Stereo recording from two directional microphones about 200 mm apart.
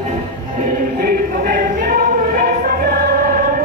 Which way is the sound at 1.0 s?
40° right (ahead or behind).